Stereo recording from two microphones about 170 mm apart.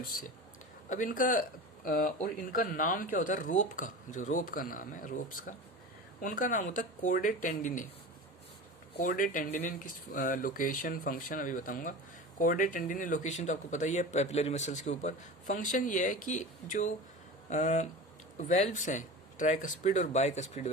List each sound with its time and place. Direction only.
0.9 s speech: 50° left (ahead or behind)
9.0 s speech: 55° left (ahead or behind)